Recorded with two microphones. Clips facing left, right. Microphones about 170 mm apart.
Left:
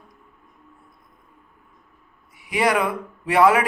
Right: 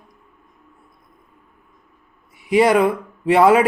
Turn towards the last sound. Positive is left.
turn(degrees=-25)  # may be behind; listen again after turning